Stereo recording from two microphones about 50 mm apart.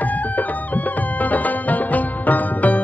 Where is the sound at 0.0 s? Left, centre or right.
Left.